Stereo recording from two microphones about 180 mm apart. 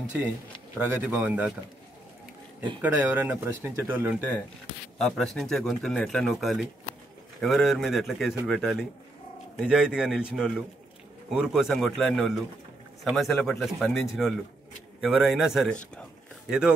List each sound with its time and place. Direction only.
0.7 s speech: 10° right (ahead or behind)
2.8 s speech: 10° right (ahead or behind)
4.9 s speech: centre (ahead or behind)
16.0 s a sound: 5° right (ahead or behind)